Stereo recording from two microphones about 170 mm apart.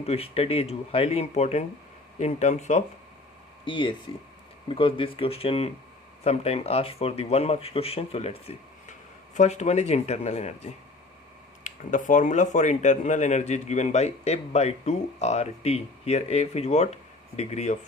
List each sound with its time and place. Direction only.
0.0 s speech: 35° left (ahead or behind)
3.7 s speech: 30° left (ahead or behind)